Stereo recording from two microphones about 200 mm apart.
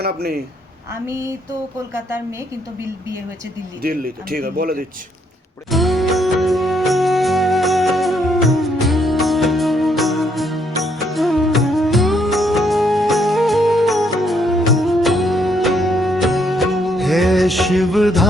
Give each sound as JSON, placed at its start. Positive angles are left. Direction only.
{"t": 0.0, "sound": "speech", "side_deg": -50}
{"t": 3.8, "sound": "speech", "side_deg": -45}
{"t": 5.7, "sound": "music", "side_deg": 0}